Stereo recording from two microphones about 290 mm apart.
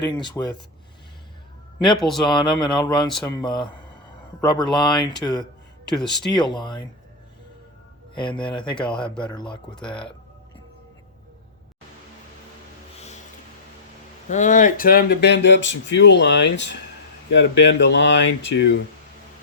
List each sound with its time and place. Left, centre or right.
0.1 s speech: centre
2.0 s speech: centre
2.2 s speech: centre
8.1 s speech: centre
14.3 s speech: left